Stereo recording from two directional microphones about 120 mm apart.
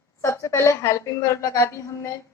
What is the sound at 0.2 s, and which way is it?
A woman's voice, 25° left (ahead or behind).